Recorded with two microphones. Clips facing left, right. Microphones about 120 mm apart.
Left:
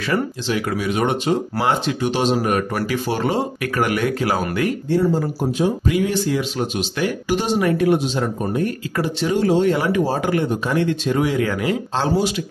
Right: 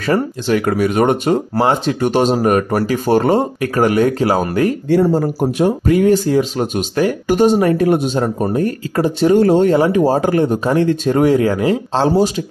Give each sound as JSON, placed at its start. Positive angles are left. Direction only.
{"t": 0.0, "sound": "speech", "side_deg": -45}
{"t": 1.5, "sound": "speech", "side_deg": -35}
{"t": 2.0, "sound": "speech", "side_deg": -50}
{"t": 3.6, "sound": "speech", "side_deg": -30}
{"t": 5.4, "sound": "speech", "side_deg": -65}
{"t": 5.9, "sound": "speech", "side_deg": -40}
{"t": 9.8, "sound": "speech", "side_deg": -30}